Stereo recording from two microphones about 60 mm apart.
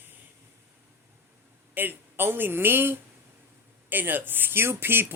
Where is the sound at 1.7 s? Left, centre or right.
Right.